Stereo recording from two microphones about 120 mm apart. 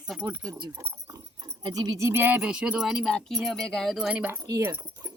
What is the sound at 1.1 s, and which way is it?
Dog, 30° right (ahead or behind).